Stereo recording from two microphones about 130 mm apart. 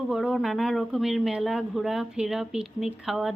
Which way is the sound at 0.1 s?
Centre (ahead or behind).